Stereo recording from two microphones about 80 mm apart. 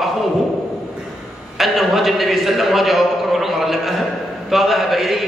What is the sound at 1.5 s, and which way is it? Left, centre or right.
A man's voice, centre.